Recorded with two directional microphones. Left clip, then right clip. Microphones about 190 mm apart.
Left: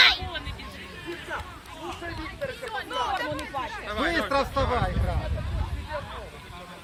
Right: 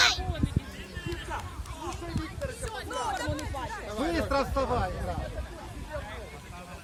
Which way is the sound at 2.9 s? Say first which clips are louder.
Left 3 dB; 40° right (ahead or behind).